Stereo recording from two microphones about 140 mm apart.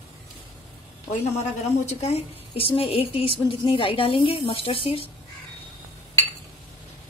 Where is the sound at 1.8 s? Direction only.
50° left (ahead or behind).